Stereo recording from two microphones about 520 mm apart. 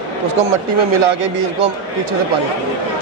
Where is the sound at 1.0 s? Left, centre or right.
Right.